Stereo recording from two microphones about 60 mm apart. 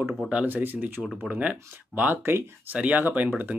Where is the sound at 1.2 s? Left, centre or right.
Centre.